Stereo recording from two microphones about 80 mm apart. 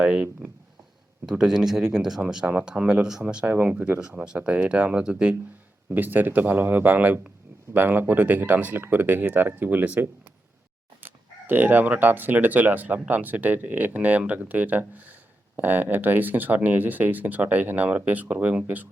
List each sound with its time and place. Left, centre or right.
0.0 s speech: centre
5.9 s speech: right